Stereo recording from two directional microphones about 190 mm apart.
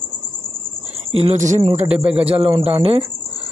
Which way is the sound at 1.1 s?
35° right (ahead or behind).